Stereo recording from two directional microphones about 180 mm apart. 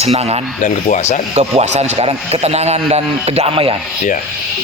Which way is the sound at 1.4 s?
40° right (ahead or behind).